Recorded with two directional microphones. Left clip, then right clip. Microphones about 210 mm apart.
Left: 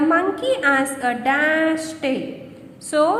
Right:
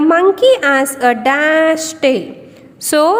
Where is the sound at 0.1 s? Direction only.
50° right (ahead or behind).